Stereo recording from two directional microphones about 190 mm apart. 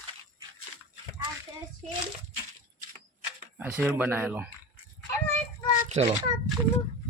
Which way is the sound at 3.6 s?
10° right (ahead or behind).